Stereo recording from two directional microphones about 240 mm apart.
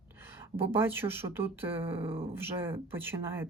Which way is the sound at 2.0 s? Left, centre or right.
Right.